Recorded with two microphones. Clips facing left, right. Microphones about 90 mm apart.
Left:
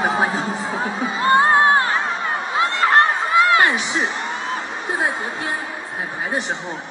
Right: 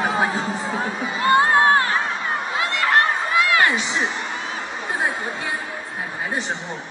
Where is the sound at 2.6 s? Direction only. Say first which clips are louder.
Left 4 dB; 30° left (ahead or behind).